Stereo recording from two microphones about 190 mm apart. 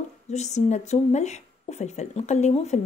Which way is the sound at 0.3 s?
35° left (ahead or behind).